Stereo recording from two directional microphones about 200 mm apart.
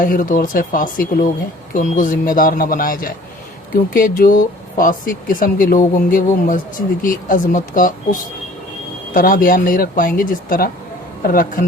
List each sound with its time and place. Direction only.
0.0 s speech: 40° left (ahead or behind)